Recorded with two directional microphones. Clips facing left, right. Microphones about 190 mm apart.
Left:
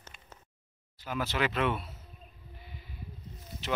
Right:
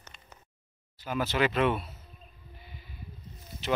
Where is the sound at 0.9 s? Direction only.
Centre (ahead or behind).